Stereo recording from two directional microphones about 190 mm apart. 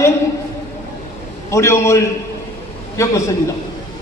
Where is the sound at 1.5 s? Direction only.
15° left (ahead or behind).